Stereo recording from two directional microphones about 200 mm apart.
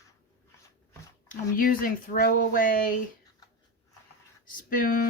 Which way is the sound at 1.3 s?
45° left (ahead or behind).